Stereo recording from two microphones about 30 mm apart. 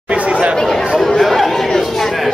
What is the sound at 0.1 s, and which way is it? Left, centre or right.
Chatter, right.